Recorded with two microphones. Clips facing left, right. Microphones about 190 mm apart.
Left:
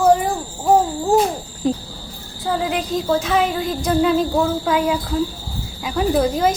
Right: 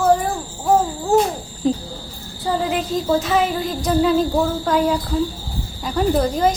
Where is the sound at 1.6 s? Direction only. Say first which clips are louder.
Right 1 dB; 5° left (ahead or behind).